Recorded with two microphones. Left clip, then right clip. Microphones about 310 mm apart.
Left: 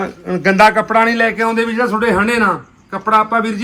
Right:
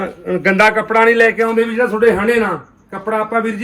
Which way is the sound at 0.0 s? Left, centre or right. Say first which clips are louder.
Even; centre.